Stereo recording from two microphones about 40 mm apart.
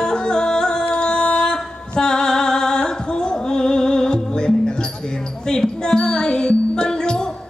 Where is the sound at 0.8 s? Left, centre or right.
Left.